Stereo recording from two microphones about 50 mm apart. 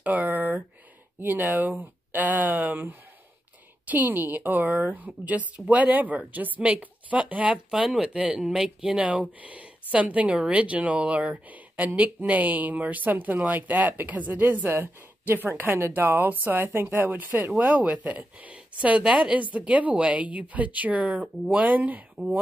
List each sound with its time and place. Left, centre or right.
0.0 s a sound: right
1.2 s a woman's voice: right
7.7 s speech: centre
9.0 s a woman's voice: right
17.6 s a woman's voice: right